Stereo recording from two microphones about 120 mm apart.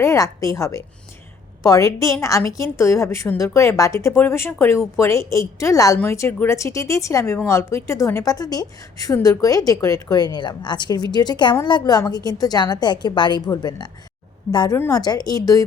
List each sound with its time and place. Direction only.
0.0 s a woman's voice: 25° left (ahead or behind)